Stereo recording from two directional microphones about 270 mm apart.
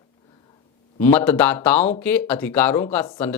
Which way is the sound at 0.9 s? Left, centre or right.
Centre.